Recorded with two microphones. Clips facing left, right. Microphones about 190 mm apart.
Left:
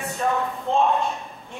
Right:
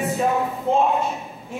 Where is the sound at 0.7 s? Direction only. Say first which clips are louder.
Right 2 dB; 5° right (ahead or behind).